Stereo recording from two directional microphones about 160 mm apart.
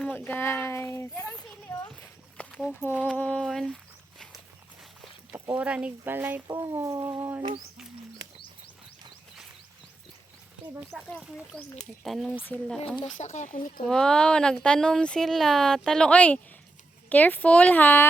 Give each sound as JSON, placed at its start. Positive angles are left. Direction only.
{"t": 0.0, "sound": "speech", "side_deg": 10}
{"t": 1.1, "sound": "speech", "side_deg": -10}
{"t": 1.6, "sound": "a sound", "side_deg": 20}
{"t": 2.5, "sound": "a sound", "side_deg": -5}
{"t": 3.0, "sound": "speech", "side_deg": 10}
{"t": 5.3, "sound": "speech", "side_deg": -10}
{"t": 10.9, "sound": "speech", "side_deg": 0}
{"t": 13.1, "sound": "speech", "side_deg": 50}
{"t": 13.8, "sound": "speech", "side_deg": 5}